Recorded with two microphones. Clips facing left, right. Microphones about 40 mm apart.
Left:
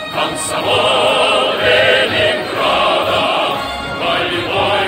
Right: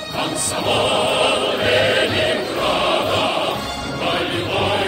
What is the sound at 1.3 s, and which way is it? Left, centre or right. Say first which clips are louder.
Music: left 5 dB; left.